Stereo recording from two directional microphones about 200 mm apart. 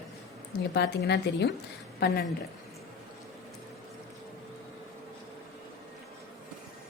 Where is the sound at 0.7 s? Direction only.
55° left (ahead or behind).